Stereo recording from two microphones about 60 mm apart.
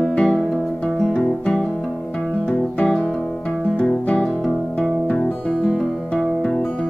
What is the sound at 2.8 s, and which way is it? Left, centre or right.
Music, centre.